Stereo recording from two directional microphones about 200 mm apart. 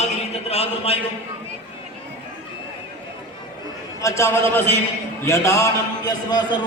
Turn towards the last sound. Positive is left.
turn(degrees=20)  # may be behind; listen again after turning